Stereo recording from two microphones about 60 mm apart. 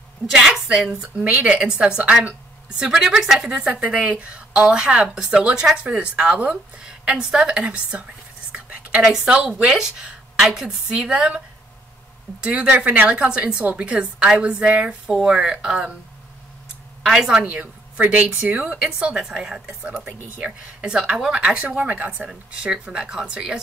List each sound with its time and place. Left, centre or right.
0.7 s a woman's voice: centre
1.3 s speech: right
1.6 s a woman's voice: centre
8.5 s whispering: centre
9.2 s a woman's voice: right
17.0 s a woman's voice: centre
17.4 s speech: right
18.7 s a woman's voice: centre
22.3 s a woman's voice: centre